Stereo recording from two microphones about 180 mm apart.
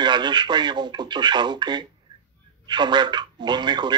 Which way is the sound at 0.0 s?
25° right (ahead or behind).